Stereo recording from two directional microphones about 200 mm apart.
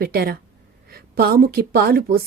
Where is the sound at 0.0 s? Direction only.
50° right (ahead or behind).